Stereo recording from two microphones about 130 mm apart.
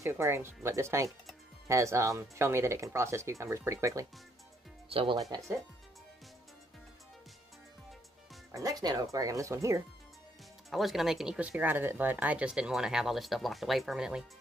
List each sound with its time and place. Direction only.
0.0 s speech: 20° right (ahead or behind)
4.8 s speech: 45° right (ahead or behind)
8.5 s speech: 25° right (ahead or behind)
10.7 s speech: centre (ahead or behind)